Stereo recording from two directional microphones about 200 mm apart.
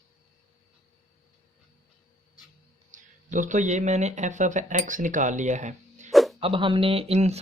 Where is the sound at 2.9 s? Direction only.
40° right (ahead or behind).